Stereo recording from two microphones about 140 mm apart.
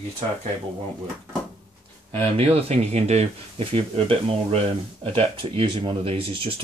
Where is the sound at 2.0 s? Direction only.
45° right (ahead or behind).